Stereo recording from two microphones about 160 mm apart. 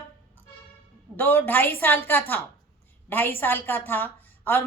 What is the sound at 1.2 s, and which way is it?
A woman's voice, 10° left (ahead or behind).